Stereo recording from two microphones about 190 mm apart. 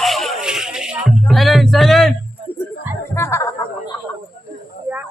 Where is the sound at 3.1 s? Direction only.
15° left (ahead or behind).